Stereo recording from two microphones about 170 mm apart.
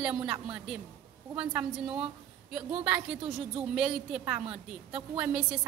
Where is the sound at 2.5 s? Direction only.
5° right (ahead or behind).